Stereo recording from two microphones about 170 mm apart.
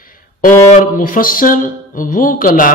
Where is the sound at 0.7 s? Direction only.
50° left (ahead or behind).